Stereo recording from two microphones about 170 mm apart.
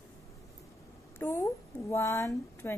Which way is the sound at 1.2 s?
15° left (ahead or behind).